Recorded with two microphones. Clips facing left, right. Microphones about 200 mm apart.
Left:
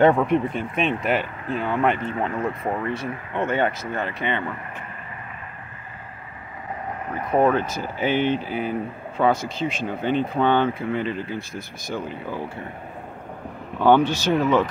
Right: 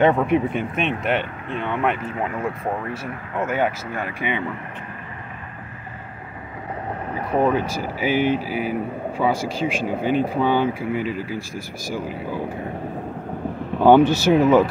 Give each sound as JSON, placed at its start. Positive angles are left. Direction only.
{"t": 0.1, "sound": "speech", "side_deg": -5}
{"t": 7.5, "sound": "speech", "side_deg": -10}
{"t": 13.7, "sound": "speech", "side_deg": -10}